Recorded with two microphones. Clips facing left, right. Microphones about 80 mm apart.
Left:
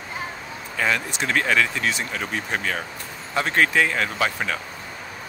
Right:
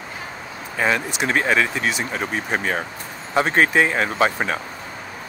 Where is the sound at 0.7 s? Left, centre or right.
Centre.